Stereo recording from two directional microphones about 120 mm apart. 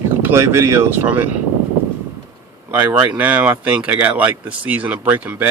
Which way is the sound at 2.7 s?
10° right (ahead or behind).